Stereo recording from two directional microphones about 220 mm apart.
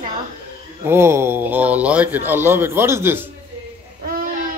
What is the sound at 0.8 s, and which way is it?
Speech, 10° right (ahead or behind).